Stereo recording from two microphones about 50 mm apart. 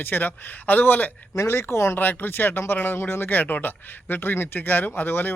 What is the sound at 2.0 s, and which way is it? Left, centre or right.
Speech, left.